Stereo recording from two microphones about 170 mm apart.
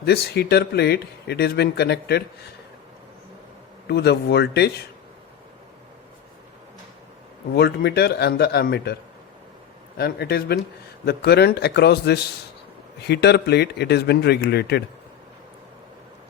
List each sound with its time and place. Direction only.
0.0 s speech: 70° left (ahead or behind)
3.8 s speech: 70° left (ahead or behind)
7.5 s speech: 70° left (ahead or behind)
10.0 s speech: 65° left (ahead or behind)